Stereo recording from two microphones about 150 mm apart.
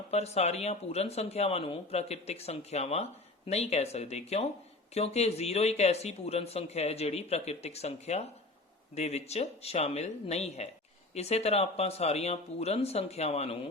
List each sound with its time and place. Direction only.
0.1 s speech: 45° left (ahead or behind)